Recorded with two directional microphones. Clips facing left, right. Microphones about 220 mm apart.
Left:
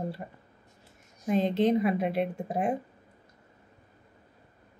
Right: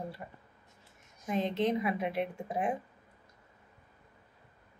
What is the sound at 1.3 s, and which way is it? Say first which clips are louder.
A woman's voice: left 6 dB; 35° left (ahead or behind).